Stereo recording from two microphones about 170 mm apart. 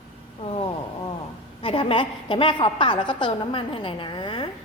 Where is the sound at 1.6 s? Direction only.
30° left (ahead or behind).